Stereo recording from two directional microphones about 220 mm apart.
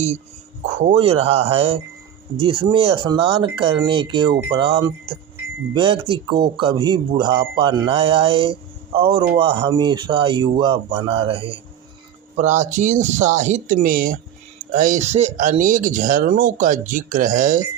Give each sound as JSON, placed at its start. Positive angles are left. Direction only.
{"t": 0.8, "sound": "speech", "side_deg": -30}